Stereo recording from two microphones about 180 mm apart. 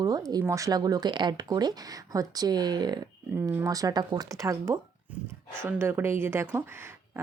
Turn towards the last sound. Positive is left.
turn(degrees=-15)  # may be behind; listen again after turning